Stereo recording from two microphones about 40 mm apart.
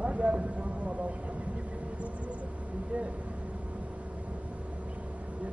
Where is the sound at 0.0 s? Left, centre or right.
Right.